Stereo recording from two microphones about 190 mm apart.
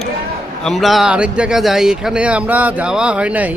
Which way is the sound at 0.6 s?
Centre (ahead or behind).